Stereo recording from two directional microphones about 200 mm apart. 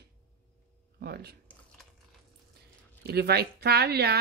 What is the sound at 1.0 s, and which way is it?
Speech, 50° right (ahead or behind).